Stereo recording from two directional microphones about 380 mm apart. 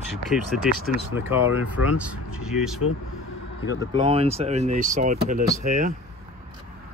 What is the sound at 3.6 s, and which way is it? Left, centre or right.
Speech, left.